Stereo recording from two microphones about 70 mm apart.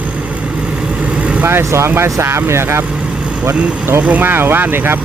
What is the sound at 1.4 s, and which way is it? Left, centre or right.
Speech, right.